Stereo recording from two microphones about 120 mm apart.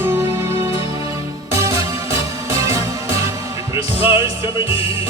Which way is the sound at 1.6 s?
25° right (ahead or behind).